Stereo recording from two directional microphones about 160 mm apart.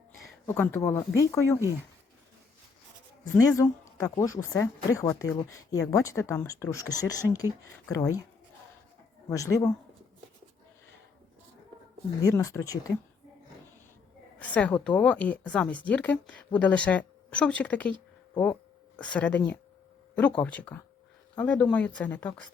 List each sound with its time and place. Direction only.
0.4 s speech: 15° left (ahead or behind)
3.3 s speech: 20° left (ahead or behind)
9.3 s speech: 20° left (ahead or behind)
12.2 s speech: 20° left (ahead or behind)
14.3 s a woman's voice: 10° left (ahead or behind)
18.9 s a woman's voice: 5° left (ahead or behind)